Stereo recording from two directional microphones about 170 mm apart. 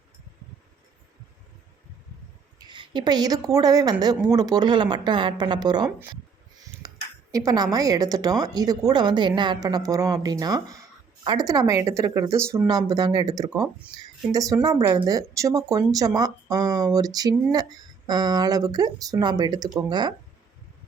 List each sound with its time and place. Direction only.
2.6 s a woman's voice: 30° right (ahead or behind)